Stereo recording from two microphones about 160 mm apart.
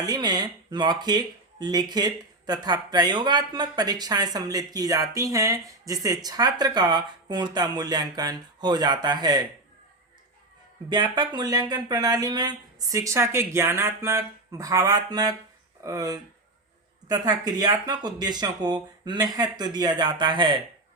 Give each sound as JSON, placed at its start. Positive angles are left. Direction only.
{"t": 0.0, "sound": "speech", "side_deg": -25}
{"t": 10.8, "sound": "speech", "side_deg": -25}